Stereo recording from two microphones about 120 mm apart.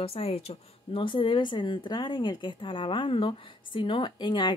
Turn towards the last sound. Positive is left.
turn(degrees=40)  # may be behind; listen again after turning